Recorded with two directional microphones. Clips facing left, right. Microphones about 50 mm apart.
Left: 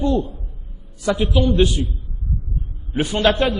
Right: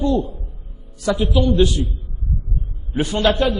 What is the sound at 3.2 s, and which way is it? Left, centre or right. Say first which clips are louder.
Speech: even; left.